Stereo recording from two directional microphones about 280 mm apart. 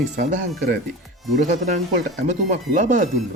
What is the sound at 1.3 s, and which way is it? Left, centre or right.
Speech, right.